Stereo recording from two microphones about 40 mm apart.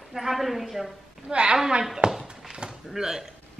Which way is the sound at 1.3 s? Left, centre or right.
Right.